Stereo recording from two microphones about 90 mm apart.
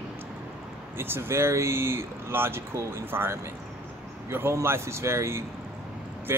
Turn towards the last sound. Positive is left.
turn(degrees=-30)  # may be behind; listen again after turning